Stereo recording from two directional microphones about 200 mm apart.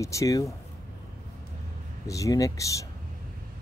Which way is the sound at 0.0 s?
15° left (ahead or behind).